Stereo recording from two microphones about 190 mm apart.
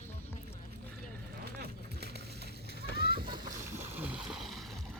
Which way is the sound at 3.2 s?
25° right (ahead or behind).